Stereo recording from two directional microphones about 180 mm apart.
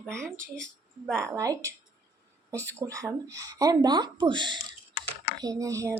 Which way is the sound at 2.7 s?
15° right (ahead or behind).